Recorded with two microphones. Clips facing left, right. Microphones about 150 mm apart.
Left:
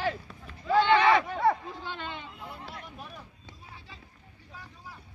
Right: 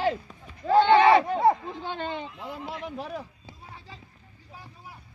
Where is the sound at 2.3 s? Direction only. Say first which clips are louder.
Right 6 dB; 90° right.